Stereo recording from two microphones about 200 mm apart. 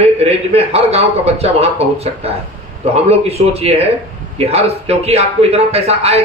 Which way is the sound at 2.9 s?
30° right (ahead or behind).